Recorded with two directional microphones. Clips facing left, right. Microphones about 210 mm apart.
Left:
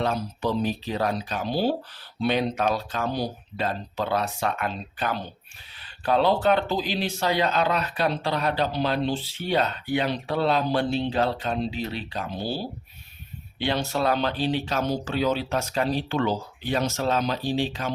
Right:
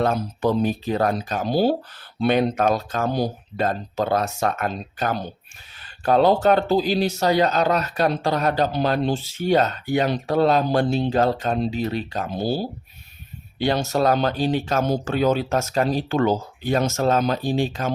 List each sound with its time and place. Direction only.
0.0 s speech: 50° right (ahead or behind)